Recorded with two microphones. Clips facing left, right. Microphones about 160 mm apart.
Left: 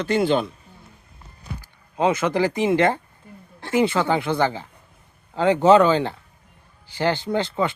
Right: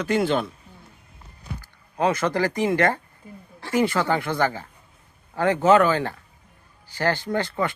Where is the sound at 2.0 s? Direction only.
20° left (ahead or behind).